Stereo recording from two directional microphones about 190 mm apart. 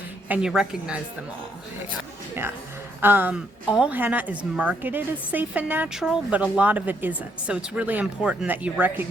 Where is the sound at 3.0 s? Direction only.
10° right (ahead or behind).